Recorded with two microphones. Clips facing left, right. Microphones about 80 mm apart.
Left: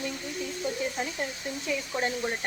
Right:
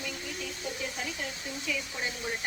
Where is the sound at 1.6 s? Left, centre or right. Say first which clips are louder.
Left 6 dB; left.